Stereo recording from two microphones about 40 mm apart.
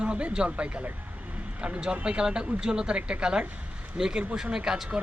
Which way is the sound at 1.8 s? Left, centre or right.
Right.